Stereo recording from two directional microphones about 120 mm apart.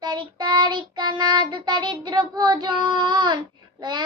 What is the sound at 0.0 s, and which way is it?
Child singing, 40° right (ahead or behind).